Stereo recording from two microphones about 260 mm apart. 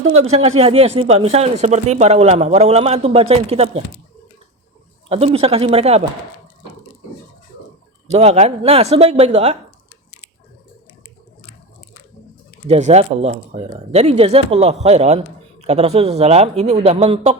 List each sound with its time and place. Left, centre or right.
0.1 s speech: right
5.0 s speech: right
8.1 s speech: right
12.6 s speech: right